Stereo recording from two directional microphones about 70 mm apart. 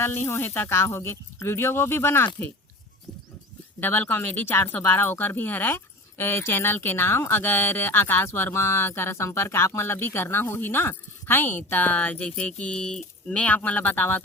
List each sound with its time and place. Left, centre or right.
0.0 s speech: left
3.8 s speech: left